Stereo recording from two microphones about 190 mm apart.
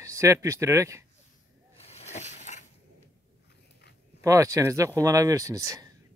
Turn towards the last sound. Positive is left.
turn(degrees=-20)  # may be behind; listen again after turning